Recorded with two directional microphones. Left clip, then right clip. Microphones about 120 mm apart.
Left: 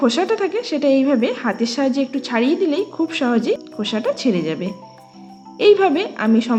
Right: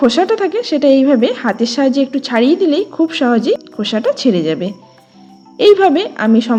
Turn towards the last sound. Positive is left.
turn(degrees=-35)  # may be behind; listen again after turning